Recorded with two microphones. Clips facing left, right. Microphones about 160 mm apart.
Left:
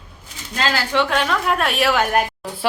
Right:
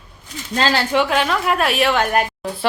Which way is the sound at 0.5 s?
30° right (ahead or behind).